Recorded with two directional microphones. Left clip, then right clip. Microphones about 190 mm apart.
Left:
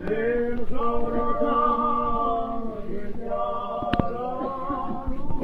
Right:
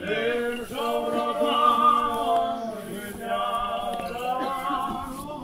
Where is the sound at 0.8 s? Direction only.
55° right (ahead or behind).